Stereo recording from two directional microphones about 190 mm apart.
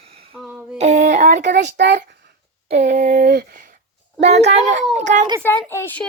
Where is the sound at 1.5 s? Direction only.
60° right (ahead or behind).